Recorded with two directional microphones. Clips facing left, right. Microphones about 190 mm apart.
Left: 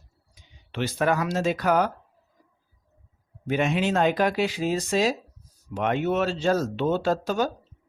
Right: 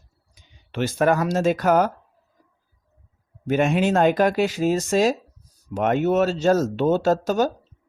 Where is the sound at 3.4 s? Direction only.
45° right (ahead or behind).